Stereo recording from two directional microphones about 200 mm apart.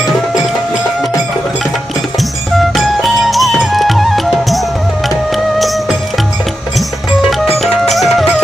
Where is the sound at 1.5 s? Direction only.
Centre (ahead or behind).